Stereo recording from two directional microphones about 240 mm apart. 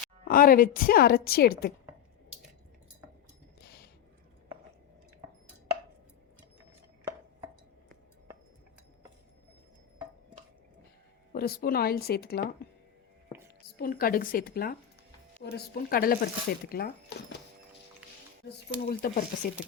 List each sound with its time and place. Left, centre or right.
0.3 s speech: left
11.3 s speech: left
13.7 s speech: left
18.9 s speech: left